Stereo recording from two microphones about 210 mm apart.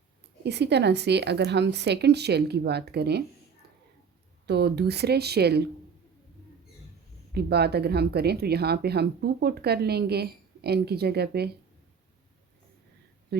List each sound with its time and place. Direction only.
0.4 s speech: 55° right (ahead or behind)
4.4 s speech: 50° right (ahead or behind)
7.3 s speech: 50° right (ahead or behind)